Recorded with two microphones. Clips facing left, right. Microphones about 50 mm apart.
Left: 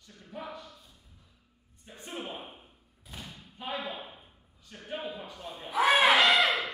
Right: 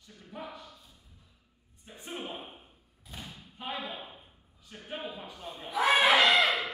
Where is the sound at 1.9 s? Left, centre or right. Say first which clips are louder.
Even; centre.